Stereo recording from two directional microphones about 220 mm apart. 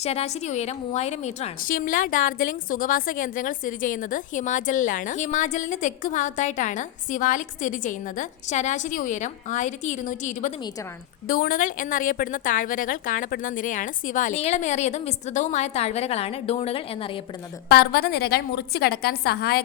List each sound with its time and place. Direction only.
0.0 s a woman's voice: 30° left (ahead or behind)
17.7 s a woman's voice: 45° left (ahead or behind)